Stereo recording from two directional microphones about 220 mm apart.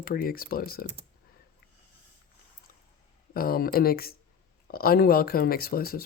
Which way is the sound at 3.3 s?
40° left (ahead or behind).